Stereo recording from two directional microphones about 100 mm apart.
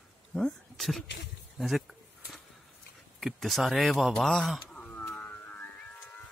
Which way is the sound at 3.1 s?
Centre (ahead or behind).